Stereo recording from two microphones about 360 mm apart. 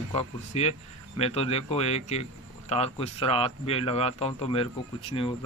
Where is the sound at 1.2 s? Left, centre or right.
Centre.